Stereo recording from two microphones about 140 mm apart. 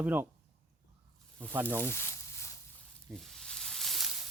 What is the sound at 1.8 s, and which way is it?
Speech, 15° left (ahead or behind).